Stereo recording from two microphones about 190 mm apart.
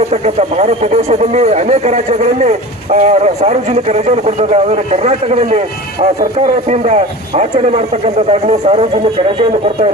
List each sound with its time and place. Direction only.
0.1 s speech: 35° right (ahead or behind)